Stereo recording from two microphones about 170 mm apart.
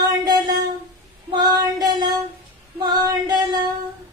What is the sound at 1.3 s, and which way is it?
Female singing, 25° right (ahead or behind).